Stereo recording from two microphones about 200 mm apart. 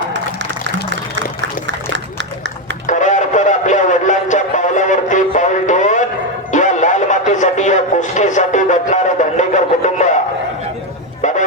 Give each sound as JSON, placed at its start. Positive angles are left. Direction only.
{"t": 2.8, "sound": "music", "side_deg": 40}